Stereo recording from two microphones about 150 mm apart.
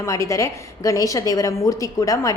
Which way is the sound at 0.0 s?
20° left (ahead or behind).